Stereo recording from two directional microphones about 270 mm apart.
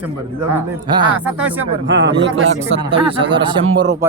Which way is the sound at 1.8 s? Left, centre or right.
Right.